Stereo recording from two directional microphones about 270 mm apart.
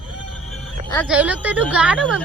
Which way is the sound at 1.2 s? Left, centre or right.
Centre.